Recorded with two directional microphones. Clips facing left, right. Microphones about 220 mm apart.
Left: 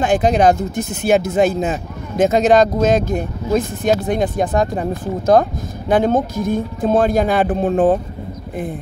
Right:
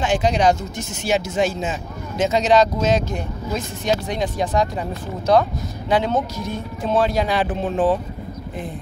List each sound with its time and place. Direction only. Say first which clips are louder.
0.0 s speech: left 4 dB; 50° left (ahead or behind)